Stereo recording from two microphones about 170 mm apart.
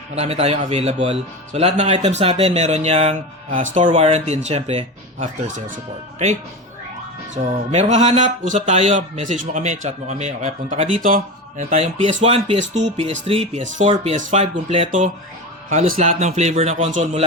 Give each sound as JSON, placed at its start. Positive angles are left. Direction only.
{"t": 0.2, "sound": "a man's voice", "side_deg": -35}
{"t": 7.7, "sound": "a man's voice", "side_deg": -40}
{"t": 11.7, "sound": "speech", "side_deg": -40}
{"t": 13.8, "sound": "speech", "side_deg": -30}
{"t": 14.2, "sound": "a man's voice", "side_deg": -50}